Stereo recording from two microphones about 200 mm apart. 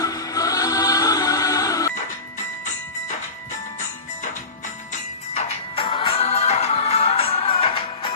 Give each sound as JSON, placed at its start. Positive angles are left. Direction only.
{"t": 0.0, "sound": "music", "side_deg": 15}
{"t": 5.3, "sound": "music", "side_deg": 35}